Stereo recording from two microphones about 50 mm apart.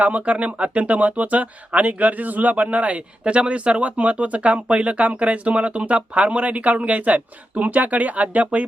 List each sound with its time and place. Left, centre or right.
0.0 s speech: right